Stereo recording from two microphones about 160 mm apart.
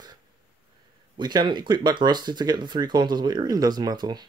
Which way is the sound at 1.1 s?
25° right (ahead or behind).